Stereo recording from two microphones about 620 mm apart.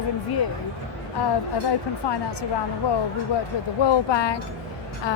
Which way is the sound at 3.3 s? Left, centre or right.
Left.